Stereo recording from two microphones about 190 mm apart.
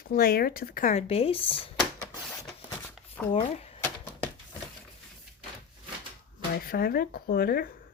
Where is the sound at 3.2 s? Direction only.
5° left (ahead or behind).